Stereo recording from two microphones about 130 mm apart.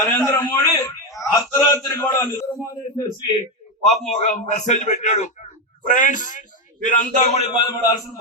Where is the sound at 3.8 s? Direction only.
60° left (ahead or behind).